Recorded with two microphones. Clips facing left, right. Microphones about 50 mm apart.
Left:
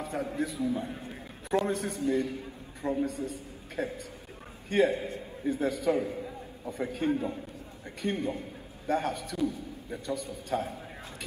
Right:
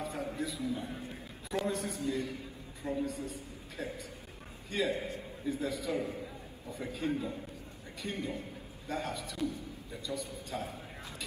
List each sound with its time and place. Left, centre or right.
0.0 s a man's voice: left